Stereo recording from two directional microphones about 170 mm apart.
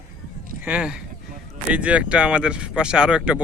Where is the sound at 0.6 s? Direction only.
10° right (ahead or behind).